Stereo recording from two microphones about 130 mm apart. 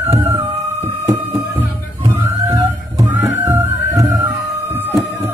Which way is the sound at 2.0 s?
25° right (ahead or behind).